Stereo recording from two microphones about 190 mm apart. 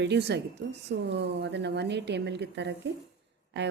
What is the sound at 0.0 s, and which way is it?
Speech, 65° right (ahead or behind).